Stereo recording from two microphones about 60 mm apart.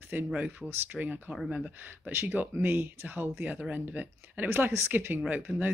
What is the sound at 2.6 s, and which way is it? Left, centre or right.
Speech, right.